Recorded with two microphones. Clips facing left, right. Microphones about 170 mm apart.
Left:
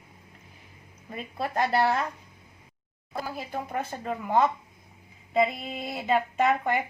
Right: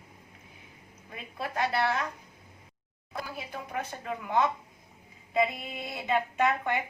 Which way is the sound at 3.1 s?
35° left (ahead or behind).